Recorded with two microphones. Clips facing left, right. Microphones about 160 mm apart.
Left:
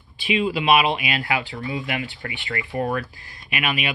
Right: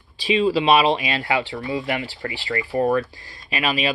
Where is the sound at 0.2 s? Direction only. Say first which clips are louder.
Right 4 dB; 35° right (ahead or behind).